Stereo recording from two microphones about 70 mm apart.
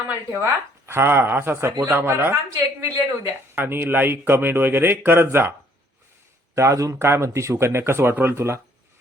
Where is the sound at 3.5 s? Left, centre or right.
Right.